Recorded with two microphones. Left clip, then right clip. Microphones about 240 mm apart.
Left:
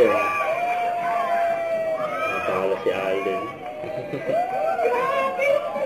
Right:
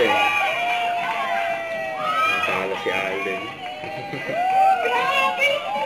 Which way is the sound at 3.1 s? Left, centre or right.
Centre.